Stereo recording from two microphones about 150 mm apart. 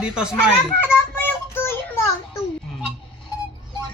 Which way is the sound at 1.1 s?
15° left (ahead or behind).